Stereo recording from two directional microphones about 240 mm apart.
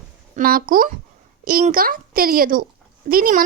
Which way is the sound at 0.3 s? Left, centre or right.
Right.